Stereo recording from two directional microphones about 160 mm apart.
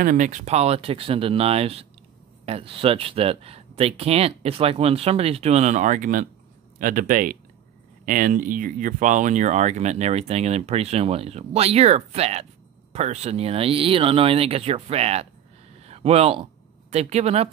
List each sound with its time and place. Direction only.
0.0 s speech: 55° right (ahead or behind)
15.8 s a sound: 40° right (ahead or behind)
16.9 s speech: 45° right (ahead or behind)